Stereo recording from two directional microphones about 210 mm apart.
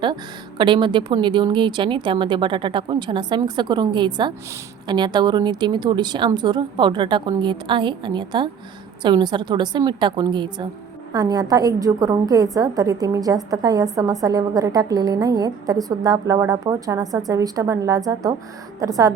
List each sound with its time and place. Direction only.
0.6 s a woman's voice: 20° right (ahead or behind)